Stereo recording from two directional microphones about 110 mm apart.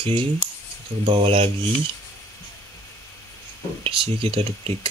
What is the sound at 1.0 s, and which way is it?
Speech, 55° right (ahead or behind).